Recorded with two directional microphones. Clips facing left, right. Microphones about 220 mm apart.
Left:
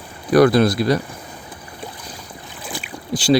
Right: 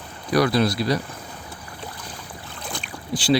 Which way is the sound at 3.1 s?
45° left (ahead or behind).